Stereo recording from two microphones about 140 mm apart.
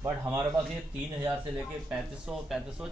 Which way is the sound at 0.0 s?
20° right (ahead or behind).